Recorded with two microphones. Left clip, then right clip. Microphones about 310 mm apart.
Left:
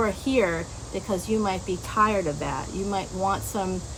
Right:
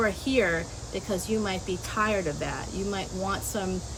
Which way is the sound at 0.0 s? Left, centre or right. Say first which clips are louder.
Left 2 dB; centre.